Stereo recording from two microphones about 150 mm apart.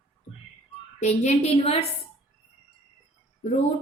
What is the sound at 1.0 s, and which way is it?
Speech, 50° left (ahead or behind).